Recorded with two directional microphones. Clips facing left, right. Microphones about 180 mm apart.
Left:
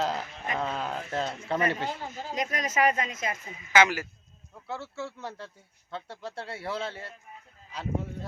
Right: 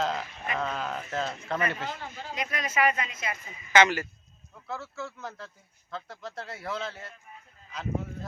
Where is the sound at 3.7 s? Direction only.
5° left (ahead or behind).